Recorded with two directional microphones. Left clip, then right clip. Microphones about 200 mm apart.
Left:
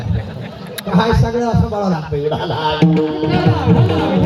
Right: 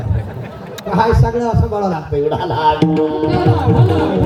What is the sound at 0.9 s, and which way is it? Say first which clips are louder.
A man's voice: right 2 dB; 35° left (ahead or behind).